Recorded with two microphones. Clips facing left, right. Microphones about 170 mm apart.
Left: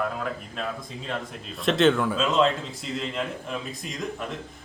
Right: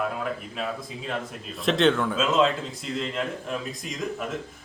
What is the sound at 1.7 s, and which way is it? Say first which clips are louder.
A man's voice: left 1 dB; centre (ahead or behind).